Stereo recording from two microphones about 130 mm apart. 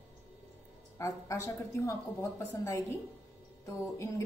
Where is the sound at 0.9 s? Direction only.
25° left (ahead or behind).